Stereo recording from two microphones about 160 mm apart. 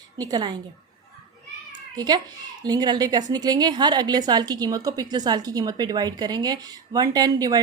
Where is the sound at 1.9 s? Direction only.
25° right (ahead or behind).